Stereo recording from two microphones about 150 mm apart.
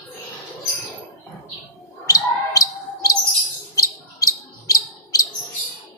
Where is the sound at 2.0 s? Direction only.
20° left (ahead or behind).